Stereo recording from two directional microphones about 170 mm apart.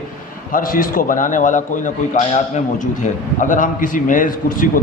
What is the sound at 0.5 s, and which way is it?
A man's voice, 55° left (ahead or behind).